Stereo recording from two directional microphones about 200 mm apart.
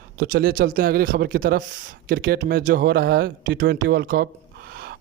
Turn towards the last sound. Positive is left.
turn(degrees=-50)  # may be behind; listen again after turning